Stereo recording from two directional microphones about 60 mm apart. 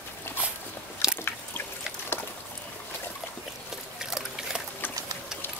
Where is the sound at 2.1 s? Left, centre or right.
Left.